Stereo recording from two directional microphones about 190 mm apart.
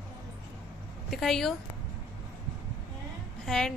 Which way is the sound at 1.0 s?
Centre (ahead or behind).